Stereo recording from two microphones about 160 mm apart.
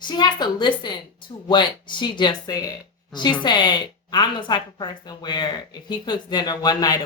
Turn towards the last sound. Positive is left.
turn(degrees=25)  # may be behind; listen again after turning